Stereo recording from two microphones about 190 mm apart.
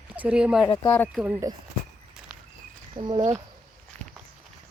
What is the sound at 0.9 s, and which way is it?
Speech, 10° left (ahead or behind).